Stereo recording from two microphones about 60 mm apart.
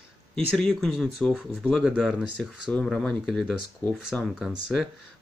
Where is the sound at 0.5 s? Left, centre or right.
Centre.